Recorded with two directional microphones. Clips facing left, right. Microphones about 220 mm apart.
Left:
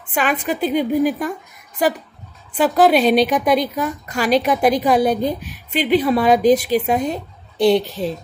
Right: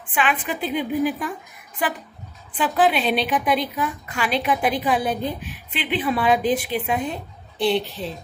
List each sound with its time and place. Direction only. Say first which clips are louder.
0.1 s a woman's voice: left 4 dB; 40° left (ahead or behind)
2.5 s a woman's voice: left 6 dB; 40° left (ahead or behind)